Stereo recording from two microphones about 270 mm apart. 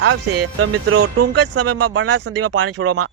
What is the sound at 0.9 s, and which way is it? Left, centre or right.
Speech, right.